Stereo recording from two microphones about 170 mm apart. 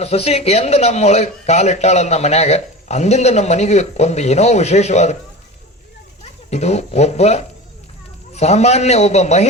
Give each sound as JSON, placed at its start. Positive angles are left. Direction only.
{"t": 0.0, "sound": "speech", "side_deg": 40}
{"t": 6.2, "sound": "speech", "side_deg": 40}